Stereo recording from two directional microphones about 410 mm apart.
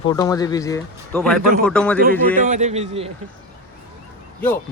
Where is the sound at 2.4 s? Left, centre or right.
Centre.